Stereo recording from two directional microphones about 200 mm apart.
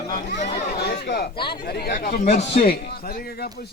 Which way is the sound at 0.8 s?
50° left (ahead or behind).